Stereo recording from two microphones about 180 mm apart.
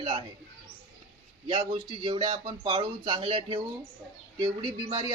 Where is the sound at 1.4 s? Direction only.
30° right (ahead or behind).